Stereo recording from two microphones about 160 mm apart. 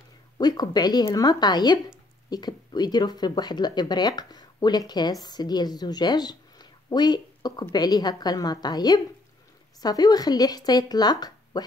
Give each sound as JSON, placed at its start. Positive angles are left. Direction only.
{"t": 0.4, "sound": "a woman's voice", "side_deg": 25}